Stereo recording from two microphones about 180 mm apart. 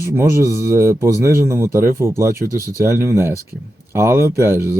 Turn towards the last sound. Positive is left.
turn(degrees=-15)  # may be behind; listen again after turning